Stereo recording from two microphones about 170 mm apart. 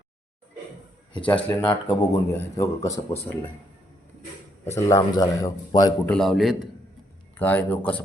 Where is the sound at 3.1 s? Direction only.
10° left (ahead or behind).